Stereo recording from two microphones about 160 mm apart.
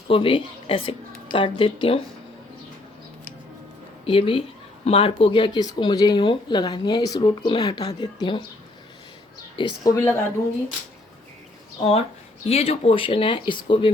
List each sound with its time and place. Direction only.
0.1 s speech: 35° left (ahead or behind)
4.0 s speech: 35° left (ahead or behind)
9.6 s speech: 30° left (ahead or behind)
9.9 s speech: 20° left (ahead or behind)
11.8 s speech: 40° left (ahead or behind)